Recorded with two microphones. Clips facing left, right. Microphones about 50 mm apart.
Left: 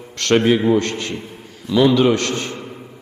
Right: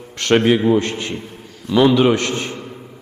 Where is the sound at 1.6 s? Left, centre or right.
Centre.